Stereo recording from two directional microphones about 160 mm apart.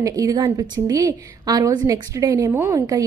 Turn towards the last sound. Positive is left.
turn(degrees=-20)  # may be behind; listen again after turning